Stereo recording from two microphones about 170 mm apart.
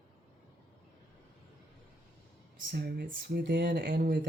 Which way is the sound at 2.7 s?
65° right (ahead or behind).